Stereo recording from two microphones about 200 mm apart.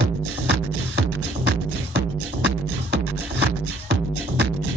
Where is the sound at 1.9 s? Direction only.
55° right (ahead or behind).